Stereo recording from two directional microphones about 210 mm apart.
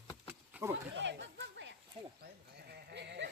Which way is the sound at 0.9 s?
55° right (ahead or behind).